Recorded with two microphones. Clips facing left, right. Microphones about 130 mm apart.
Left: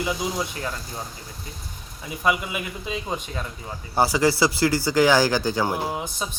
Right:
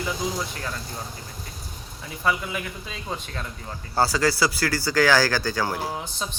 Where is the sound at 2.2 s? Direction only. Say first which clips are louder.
Left 2 dB; 15° left (ahead or behind).